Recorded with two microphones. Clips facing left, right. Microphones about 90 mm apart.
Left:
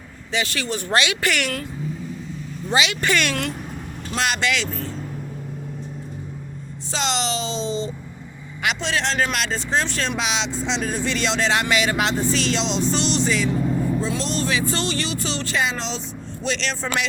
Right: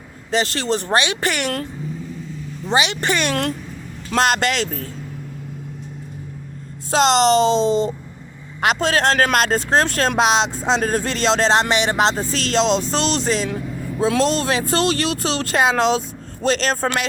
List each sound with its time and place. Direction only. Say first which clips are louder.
0.3 s speech: right 5 dB; 35° right (ahead or behind)
0.9 s speech: left 2 dB; 25° right (ahead or behind)
2.7 s speech: right 1 dB; 30° right (ahead or behind)
4.1 s speech: right 5 dB; 45° right (ahead or behind)
6.9 s speech: right 10 dB; 45° right (ahead or behind)
16.4 s speech: right 7 dB; 45° right (ahead or behind)